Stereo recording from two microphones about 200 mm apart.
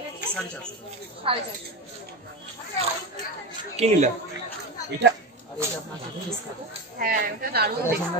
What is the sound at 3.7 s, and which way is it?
Speech, 35° right (ahead or behind).